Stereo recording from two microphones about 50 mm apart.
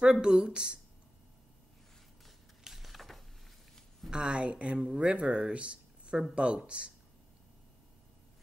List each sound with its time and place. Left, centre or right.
0.0 s speech: centre
2.6 s a sound: centre
4.1 s speech: centre